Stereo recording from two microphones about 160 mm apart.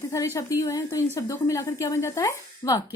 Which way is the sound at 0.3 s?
20° left (ahead or behind).